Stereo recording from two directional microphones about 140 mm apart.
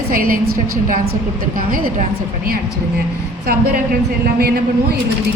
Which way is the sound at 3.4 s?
90° right.